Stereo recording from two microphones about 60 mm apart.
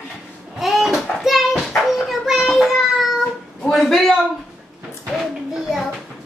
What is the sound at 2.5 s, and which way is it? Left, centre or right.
Child singing, centre.